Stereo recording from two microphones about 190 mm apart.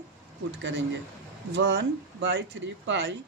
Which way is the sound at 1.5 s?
70° right (ahead or behind).